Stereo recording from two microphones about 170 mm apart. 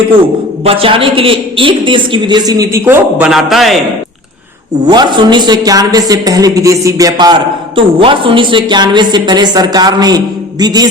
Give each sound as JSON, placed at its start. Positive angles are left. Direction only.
{"t": 0.6, "sound": "a man's voice", "side_deg": -35}
{"t": 4.9, "sound": "a man's voice", "side_deg": -25}